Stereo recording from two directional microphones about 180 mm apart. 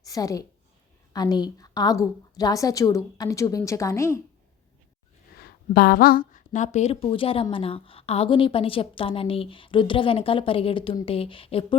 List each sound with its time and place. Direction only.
0.0 s a woman's voice: 20° left (ahead or behind)
5.4 s a woman's voice: 55° left (ahead or behind); by 11.8 s 30° left (ahead or behind)